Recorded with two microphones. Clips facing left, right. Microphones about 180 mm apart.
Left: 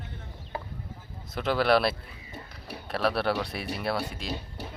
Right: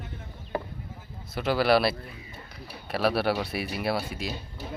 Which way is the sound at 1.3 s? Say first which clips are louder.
Right 1 dB; 5° right (ahead or behind).